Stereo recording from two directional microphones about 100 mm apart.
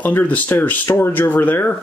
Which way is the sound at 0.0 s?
15° left (ahead or behind).